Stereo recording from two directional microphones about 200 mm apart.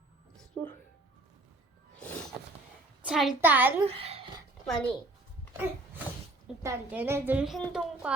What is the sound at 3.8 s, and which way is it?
Speech, 30° right (ahead or behind).